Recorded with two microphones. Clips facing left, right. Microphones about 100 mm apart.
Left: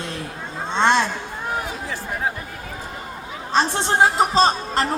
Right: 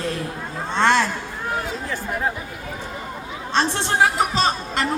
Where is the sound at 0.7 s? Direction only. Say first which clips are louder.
Even; 20° left (ahead or behind).